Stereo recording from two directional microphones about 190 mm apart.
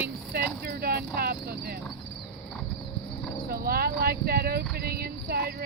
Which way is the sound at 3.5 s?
50° right (ahead or behind).